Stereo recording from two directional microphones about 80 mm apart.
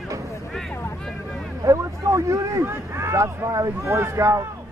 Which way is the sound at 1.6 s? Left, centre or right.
Right.